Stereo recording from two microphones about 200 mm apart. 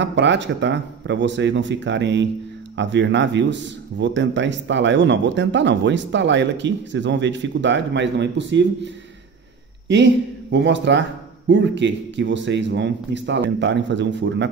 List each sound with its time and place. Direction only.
0.0 s speech: 60° right (ahead or behind)
10.5 s speech: 60° right (ahead or behind)